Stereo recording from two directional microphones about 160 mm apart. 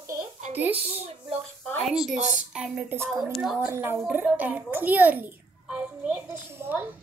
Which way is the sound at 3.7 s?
15° right (ahead or behind).